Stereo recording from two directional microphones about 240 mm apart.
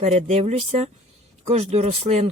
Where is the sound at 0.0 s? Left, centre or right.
Right.